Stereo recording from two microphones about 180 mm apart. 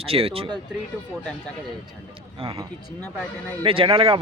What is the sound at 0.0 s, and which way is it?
Speech, 30° right (ahead or behind).